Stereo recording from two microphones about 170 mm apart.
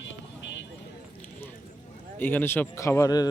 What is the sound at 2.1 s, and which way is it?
Speech, 10° left (ahead or behind).